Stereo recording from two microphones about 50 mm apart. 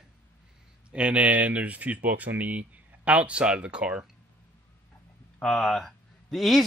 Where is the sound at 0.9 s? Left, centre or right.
Right.